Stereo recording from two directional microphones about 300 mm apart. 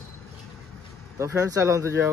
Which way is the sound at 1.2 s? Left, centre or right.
Centre.